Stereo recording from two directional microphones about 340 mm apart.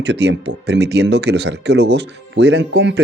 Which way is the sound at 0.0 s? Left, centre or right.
Right.